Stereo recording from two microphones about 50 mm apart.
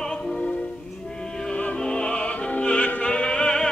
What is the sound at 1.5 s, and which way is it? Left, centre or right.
Music, left.